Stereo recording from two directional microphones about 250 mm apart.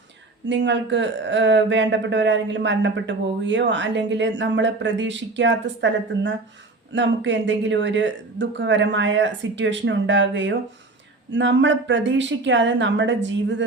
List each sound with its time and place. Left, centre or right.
0.4 s speech: right